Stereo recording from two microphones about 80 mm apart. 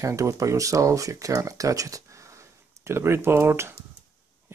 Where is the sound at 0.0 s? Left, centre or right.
Right.